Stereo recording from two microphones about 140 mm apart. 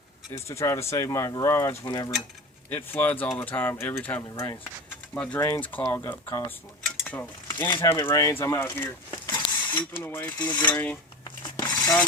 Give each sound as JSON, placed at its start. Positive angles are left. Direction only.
{"t": 0.3, "sound": "speech", "side_deg": 20}
{"t": 2.6, "sound": "speech", "side_deg": 15}
{"t": 7.1, "sound": "stir", "side_deg": 15}
{"t": 7.8, "sound": "speech", "side_deg": 15}
{"t": 9.0, "sound": "a sound", "side_deg": 20}
{"t": 9.9, "sound": "speech", "side_deg": 15}
{"t": 11.4, "sound": "a sound", "side_deg": 30}